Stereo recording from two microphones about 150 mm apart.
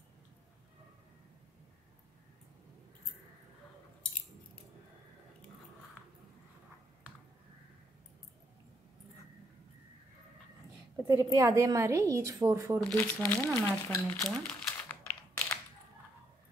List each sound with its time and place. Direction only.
11.1 s a woman's voice: 20° right (ahead or behind)
12.8 s speech: 10° left (ahead or behind)
14.5 s typing: 10° left (ahead or behind)